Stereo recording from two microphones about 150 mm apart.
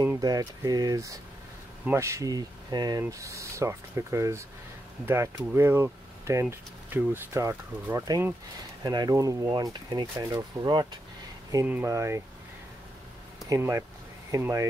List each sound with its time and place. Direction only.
0.0 s speech: 20° right (ahead or behind)
9.5 s speech: 35° right (ahead or behind)
11.6 s speech: 15° right (ahead or behind)
13.5 s speech: 20° right (ahead or behind)